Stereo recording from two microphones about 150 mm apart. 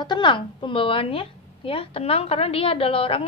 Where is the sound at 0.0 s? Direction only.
30° left (ahead or behind).